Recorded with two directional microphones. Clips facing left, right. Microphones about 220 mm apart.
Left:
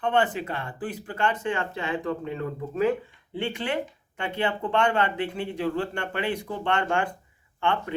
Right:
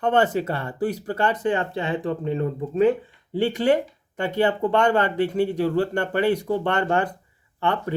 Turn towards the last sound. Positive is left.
turn(degrees=-40)  # may be behind; listen again after turning